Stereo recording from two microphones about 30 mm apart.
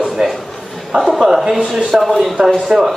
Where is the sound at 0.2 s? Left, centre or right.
Centre.